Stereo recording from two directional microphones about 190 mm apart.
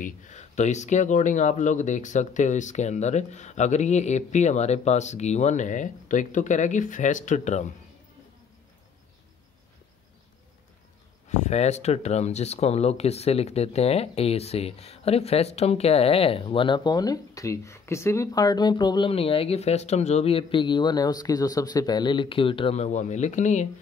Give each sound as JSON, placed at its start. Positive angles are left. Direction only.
{"t": 0.0, "sound": "speech", "side_deg": 40}
{"t": 11.2, "sound": "speech", "side_deg": 35}